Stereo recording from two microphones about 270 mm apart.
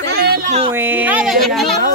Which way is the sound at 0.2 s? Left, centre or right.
Right.